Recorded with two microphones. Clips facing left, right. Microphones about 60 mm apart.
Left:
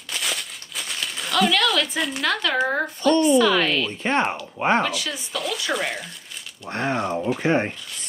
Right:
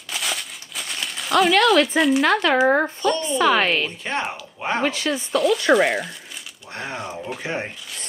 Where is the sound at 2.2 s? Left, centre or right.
Right.